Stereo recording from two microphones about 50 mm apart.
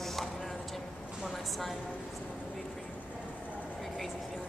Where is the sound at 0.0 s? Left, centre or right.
Centre.